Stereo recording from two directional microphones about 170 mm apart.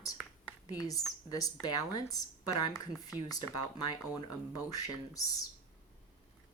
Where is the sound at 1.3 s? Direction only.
20° left (ahead or behind).